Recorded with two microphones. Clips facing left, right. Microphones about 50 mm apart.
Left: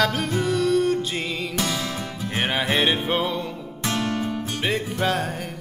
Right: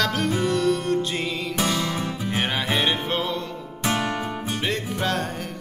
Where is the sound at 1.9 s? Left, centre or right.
Centre.